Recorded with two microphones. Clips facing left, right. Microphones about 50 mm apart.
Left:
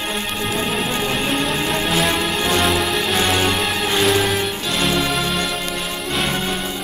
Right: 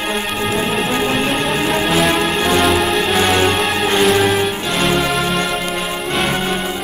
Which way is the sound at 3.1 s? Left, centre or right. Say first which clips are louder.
Right 4 dB; centre.